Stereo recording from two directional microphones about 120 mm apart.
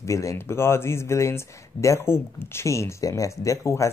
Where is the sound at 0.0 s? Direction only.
25° left (ahead or behind).